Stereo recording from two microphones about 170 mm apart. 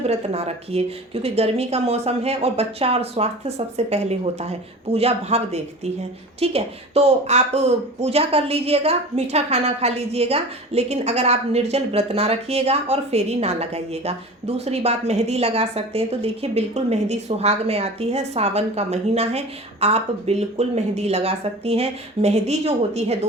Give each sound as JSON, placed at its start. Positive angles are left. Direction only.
{"t": 0.0, "sound": "a woman's voice", "side_deg": -40}